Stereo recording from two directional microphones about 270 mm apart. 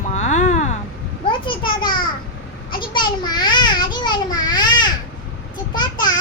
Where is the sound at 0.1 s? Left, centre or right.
Left.